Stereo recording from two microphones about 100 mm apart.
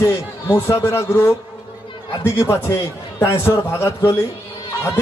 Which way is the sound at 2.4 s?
25° left (ahead or behind).